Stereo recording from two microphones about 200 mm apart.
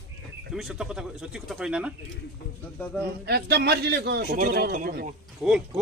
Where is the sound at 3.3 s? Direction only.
55° right (ahead or behind).